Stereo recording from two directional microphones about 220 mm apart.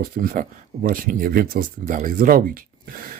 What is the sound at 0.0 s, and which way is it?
Speech, 40° right (ahead or behind).